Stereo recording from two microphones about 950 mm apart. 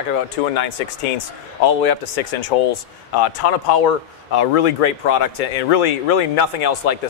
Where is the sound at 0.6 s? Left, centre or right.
Left.